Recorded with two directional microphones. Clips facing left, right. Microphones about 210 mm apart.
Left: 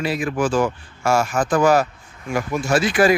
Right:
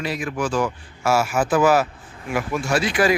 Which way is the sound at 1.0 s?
5° right (ahead or behind).